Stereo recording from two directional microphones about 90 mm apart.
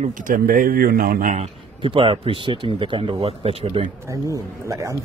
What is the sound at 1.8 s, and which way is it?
Speech, 70° right (ahead or behind).